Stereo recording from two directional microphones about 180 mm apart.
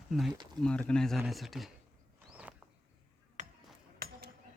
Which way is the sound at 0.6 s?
5° left (ahead or behind).